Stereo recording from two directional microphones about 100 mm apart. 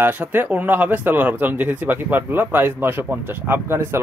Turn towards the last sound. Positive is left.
turn(degrees=-25)  # may be behind; listen again after turning